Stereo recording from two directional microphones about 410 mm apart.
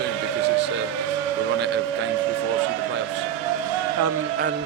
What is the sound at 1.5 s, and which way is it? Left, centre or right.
Speech, right.